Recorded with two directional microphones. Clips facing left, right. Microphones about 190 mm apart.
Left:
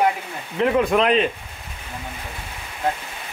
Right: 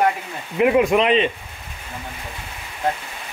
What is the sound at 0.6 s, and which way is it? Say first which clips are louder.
Speech: right 2 dB; 10° right (ahead or behind).